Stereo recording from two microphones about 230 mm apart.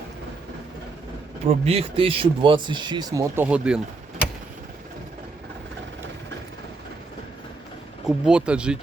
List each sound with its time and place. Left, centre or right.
1.6 s speech: right; by 3.8 s centre
8.0 s speech: centre